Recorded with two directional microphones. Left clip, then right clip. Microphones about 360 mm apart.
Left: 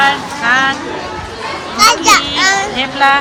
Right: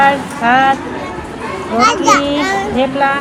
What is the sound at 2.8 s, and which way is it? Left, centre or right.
Speech, centre.